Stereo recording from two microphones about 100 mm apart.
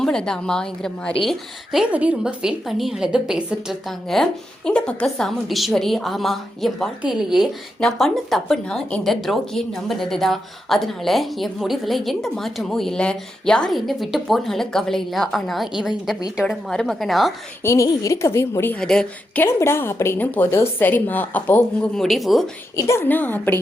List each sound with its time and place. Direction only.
0.0 s a woman's voice: 5° left (ahead or behind)
1.8 s a woman's voice: 10° right (ahead or behind)
3.8 s speech: 5° left (ahead or behind)
17.6 s a woman's voice: 30° left (ahead or behind)
18.8 s a woman's voice: 5° left (ahead or behind)
19.4 s a woman's voice: 25° left (ahead or behind)
21.9 s speech: centre (ahead or behind)
22.8 s a woman's voice: 25° left (ahead or behind)